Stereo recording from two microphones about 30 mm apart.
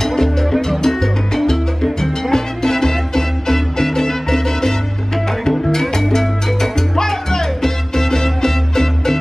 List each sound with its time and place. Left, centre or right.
0.0 s salsa music: centre
2.3 s music: centre
5.7 s salsa music: centre